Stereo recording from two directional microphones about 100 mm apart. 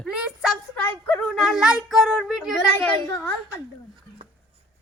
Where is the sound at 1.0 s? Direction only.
15° left (ahead or behind).